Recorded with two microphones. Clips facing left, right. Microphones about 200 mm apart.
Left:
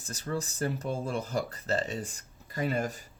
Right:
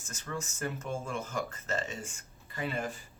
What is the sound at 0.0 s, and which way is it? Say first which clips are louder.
Speech: left 5 dB; 35° left (ahead or behind).